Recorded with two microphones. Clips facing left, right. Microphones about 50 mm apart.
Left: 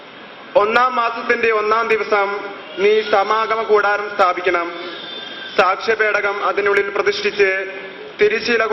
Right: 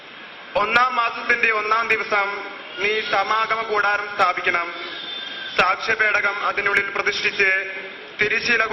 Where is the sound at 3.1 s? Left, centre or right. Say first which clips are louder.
Left 5 dB; centre.